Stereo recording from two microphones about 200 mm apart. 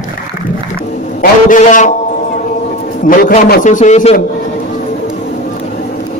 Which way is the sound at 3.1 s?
45° left (ahead or behind).